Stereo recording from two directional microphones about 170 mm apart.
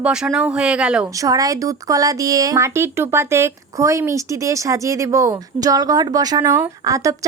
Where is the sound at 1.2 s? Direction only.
20° right (ahead or behind).